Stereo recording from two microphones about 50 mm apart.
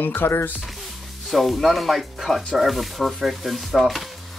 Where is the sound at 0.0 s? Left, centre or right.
Left.